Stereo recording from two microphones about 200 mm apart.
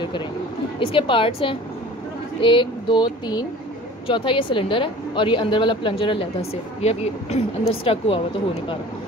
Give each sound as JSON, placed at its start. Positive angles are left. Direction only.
{"t": 0.7, "sound": "a woman's voice", "side_deg": 25}